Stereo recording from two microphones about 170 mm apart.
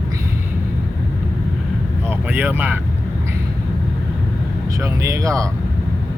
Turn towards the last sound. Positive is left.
turn(degrees=-20)  # may be behind; listen again after turning